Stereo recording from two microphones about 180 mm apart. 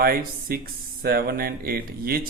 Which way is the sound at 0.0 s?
55° right (ahead or behind).